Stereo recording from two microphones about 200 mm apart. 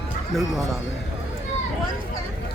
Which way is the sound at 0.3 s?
Centre (ahead or behind).